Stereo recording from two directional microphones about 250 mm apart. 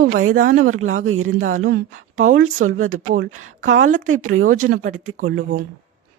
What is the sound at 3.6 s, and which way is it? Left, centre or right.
Speech, right.